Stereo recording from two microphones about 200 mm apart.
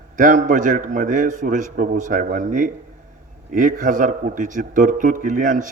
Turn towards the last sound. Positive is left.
turn(degrees=-40)  # may be behind; listen again after turning